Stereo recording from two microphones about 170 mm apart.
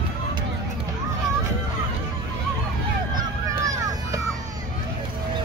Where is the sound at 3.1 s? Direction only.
20° right (ahead or behind).